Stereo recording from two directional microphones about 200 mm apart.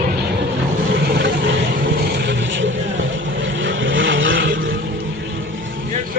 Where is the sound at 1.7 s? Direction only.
50° right (ahead or behind); by 5.9 s 70° right (ahead or behind).